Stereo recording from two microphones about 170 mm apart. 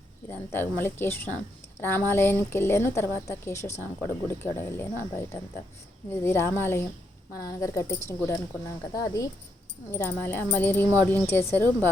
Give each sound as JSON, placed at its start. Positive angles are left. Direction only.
{"t": 0.3, "sound": "speech", "side_deg": 10}
{"t": 9.0, "sound": "speech", "side_deg": 20}